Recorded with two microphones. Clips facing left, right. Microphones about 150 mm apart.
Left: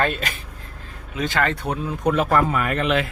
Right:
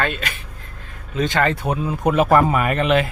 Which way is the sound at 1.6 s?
10° right (ahead or behind).